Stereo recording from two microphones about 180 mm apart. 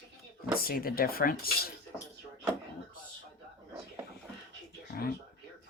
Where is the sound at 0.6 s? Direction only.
55° left (ahead or behind).